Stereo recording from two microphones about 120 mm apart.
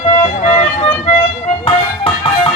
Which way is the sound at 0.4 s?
65° left (ahead or behind).